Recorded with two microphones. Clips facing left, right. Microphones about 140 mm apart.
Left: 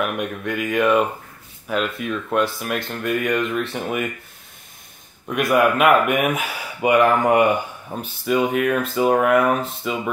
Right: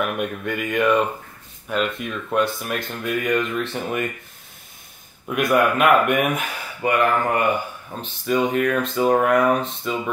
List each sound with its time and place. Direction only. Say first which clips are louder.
0.0 s speech: even; centre (ahead or behind)
5.3 s speech: left 1 dB; centre (ahead or behind)
6.8 s speech: left 4 dB; 15° left (ahead or behind)
8.0 s speech: left 1 dB; 5° left (ahead or behind)